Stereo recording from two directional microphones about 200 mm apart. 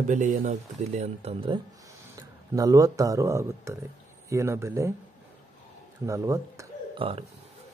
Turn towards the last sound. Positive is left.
turn(degrees=-30)  # may be behind; listen again after turning